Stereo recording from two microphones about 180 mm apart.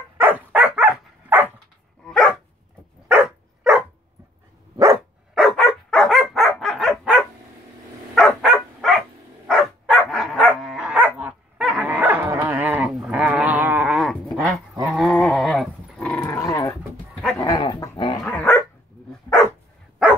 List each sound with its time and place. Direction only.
0.2 s dog: 10° right (ahead or behind)
2.0 s dog: centre (ahead or behind)
5.3 s dog: centre (ahead or behind)
16.1 s dog: 15° left (ahead or behind)
18.2 s dog: 5° left (ahead or behind)